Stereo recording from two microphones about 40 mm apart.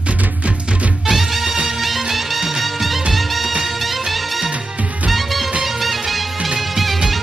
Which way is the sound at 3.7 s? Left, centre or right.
Centre.